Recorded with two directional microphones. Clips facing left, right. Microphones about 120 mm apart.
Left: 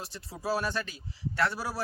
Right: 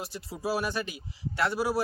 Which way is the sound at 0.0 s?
10° right (ahead or behind).